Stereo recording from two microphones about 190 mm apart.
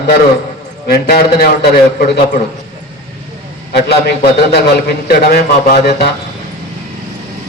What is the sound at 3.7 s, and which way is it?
A man's voice, 55° left (ahead or behind).